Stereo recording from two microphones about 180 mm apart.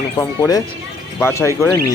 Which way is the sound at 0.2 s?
20° left (ahead or behind).